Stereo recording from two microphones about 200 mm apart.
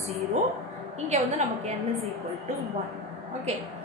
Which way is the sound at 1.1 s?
35° right (ahead or behind).